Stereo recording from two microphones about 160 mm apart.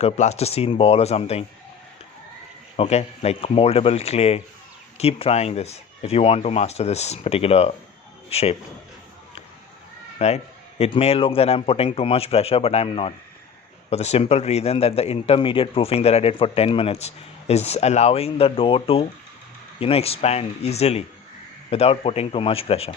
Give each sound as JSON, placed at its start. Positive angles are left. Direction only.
{"t": 0.0, "sound": "speech", "side_deg": 40}
{"t": 2.7, "sound": "a man's voice", "side_deg": 40}
{"t": 10.2, "sound": "speech", "side_deg": 40}